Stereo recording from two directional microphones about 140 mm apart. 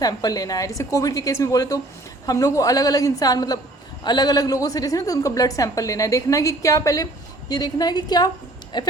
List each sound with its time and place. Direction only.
0.0 s a woman's voice: 25° left (ahead or behind)